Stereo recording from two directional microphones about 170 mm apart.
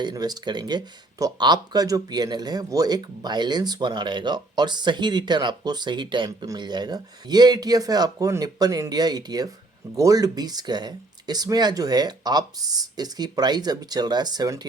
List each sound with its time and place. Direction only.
0.0 s speech: 25° right (ahead or behind)